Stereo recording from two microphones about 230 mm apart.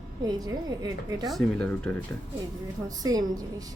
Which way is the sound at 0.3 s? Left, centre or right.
Centre.